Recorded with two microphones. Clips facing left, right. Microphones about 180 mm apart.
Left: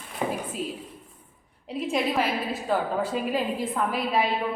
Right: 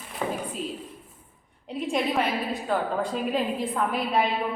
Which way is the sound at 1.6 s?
Centre (ahead or behind).